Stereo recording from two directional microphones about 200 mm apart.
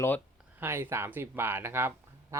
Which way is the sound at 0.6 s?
10° right (ahead or behind).